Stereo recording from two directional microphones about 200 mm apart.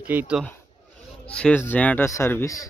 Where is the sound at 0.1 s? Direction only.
5° right (ahead or behind).